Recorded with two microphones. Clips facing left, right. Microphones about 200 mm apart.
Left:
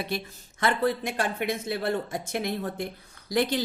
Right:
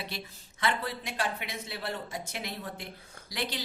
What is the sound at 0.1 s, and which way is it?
Speech, 50° left (ahead or behind).